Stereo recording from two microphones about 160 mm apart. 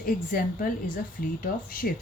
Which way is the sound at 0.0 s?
65° left (ahead or behind).